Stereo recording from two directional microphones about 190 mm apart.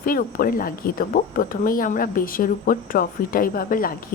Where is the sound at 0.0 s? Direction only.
50° left (ahead or behind).